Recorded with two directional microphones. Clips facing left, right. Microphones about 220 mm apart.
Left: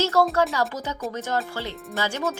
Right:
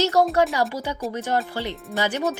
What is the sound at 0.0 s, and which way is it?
A woman's voice, 15° right (ahead or behind).